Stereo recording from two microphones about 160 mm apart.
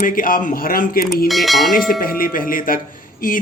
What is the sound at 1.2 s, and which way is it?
Bell, centre (ahead or behind).